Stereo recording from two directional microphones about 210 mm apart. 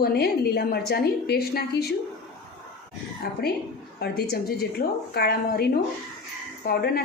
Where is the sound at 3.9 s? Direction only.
50° left (ahead or behind).